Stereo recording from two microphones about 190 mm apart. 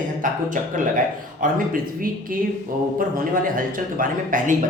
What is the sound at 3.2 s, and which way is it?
Speech, 45° right (ahead or behind).